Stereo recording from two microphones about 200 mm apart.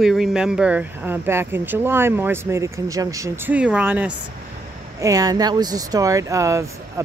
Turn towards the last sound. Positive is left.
turn(degrees=-15)  # may be behind; listen again after turning